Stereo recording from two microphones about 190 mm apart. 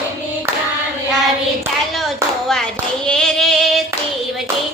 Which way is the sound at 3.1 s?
5° left (ahead or behind).